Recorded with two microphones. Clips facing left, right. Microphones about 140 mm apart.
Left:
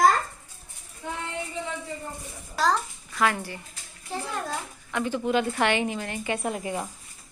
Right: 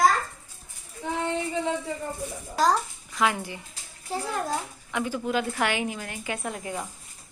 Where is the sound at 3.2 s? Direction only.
15° right (ahead or behind); by 6.8 s 5° left (ahead or behind).